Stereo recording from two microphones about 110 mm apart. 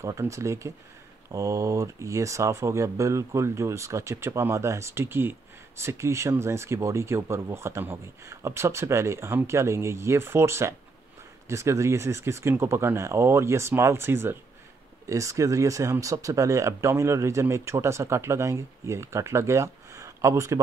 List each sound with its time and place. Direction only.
0.0 s speech: 30° right (ahead or behind)